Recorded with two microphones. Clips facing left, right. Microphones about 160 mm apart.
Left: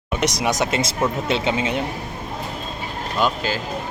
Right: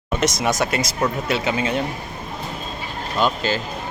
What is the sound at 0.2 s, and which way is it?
Speech, 15° left (ahead or behind).